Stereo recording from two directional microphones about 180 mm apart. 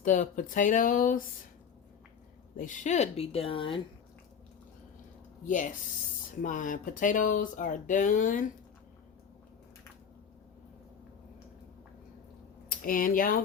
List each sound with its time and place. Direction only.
0.0 s speech: 45° left (ahead or behind)
2.6 s a woman's voice: 45° left (ahead or behind)
5.5 s speech: 45° left (ahead or behind)
12.6 s speech: 50° left (ahead or behind)